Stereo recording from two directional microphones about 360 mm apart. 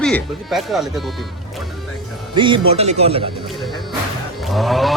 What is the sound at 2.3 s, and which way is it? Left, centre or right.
Speech, centre.